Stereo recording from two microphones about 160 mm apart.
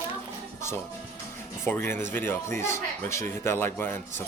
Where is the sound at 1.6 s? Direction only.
10° left (ahead or behind).